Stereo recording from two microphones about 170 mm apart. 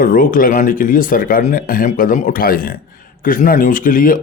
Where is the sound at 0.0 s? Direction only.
55° left (ahead or behind).